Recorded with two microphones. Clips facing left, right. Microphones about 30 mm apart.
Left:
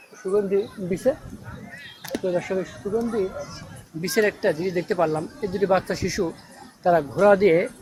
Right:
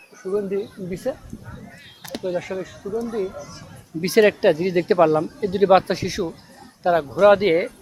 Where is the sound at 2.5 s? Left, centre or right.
Centre.